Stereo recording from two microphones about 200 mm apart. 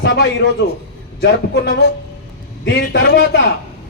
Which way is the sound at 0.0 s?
60° left (ahead or behind).